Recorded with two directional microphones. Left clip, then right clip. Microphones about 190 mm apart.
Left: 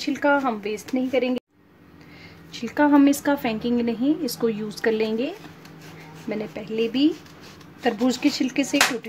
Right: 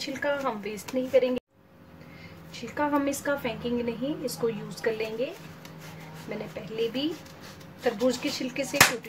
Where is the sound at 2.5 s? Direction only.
50° left (ahead or behind).